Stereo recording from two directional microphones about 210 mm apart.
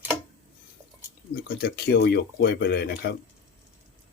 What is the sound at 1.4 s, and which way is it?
Speech, 45° left (ahead or behind).